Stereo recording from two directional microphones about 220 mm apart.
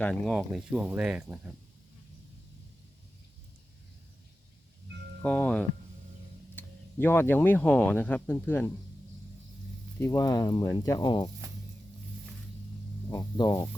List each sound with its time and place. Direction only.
0.0 s speech: centre (ahead or behind)
5.2 s speech: 5° left (ahead or behind)
10.0 s speech: 15° left (ahead or behind)
13.1 s speech: 20° left (ahead or behind)